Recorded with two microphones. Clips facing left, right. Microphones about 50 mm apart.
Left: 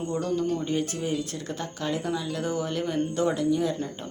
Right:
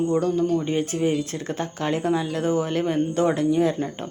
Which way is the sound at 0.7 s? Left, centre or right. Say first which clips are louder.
Right 5 dB; right.